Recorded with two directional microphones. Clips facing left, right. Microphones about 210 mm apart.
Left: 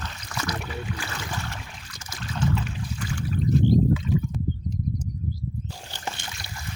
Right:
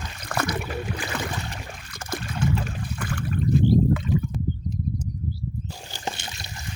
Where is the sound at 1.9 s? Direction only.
55° right (ahead or behind).